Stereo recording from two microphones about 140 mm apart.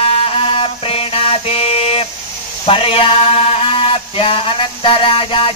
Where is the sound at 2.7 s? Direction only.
40° left (ahead or behind).